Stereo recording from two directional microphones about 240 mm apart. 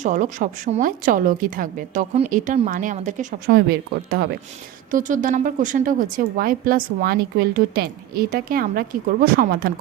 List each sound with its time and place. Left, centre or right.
0.0 s a woman's voice: right
4.9 s a woman's voice: right